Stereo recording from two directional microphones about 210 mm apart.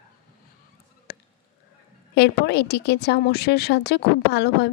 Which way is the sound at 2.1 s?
50° left (ahead or behind).